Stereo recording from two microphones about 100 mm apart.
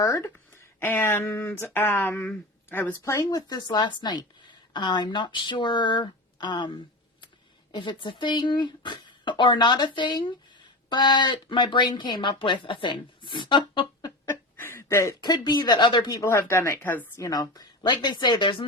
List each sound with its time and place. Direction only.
0.0 s speech: 25° left (ahead or behind)
3.0 s speech: 30° left (ahead or behind); by 14.1 s 55° left (ahead or behind)
14.3 s a sound: 20° left (ahead or behind)
15.2 s speech: 45° left (ahead or behind)
16.2 s speech: 25° left (ahead or behind)
17.2 s speech: 35° left (ahead or behind)